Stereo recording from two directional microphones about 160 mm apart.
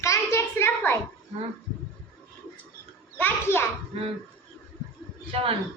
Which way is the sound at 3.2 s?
15° left (ahead or behind).